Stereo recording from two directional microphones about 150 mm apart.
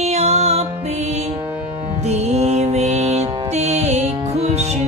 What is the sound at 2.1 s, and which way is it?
Mantra, 45° right (ahead or behind).